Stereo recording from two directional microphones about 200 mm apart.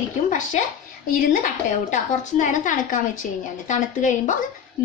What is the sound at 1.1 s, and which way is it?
A woman's voice, 40° left (ahead or behind).